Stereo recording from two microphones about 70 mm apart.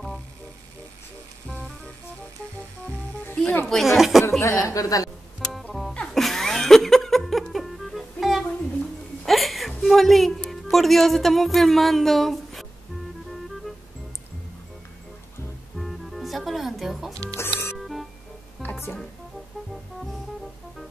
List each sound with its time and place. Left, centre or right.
3.3 s speech: left
3.6 s speech: centre
4.4 s a woman's voice: left
5.4 s music: centre
9.2 s a sound: centre
9.8 s speech: centre
15.8 s music: centre
17.1 s music: right
17.4 s music: left
17.7 s music: centre
18.6 s music: left